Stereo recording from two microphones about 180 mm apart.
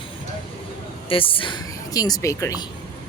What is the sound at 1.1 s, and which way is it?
A woman's voice, 30° left (ahead or behind).